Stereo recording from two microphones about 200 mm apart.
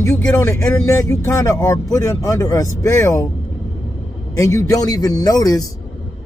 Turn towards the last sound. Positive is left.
turn(degrees=20)  # may be behind; listen again after turning